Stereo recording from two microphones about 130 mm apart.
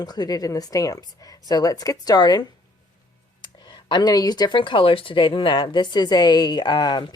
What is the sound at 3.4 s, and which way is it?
Speech, 35° left (ahead or behind).